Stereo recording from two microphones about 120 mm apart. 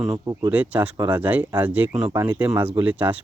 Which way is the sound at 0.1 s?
25° right (ahead or behind).